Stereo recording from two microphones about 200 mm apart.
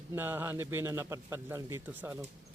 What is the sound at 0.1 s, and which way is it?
A man's voice, 10° right (ahead or behind).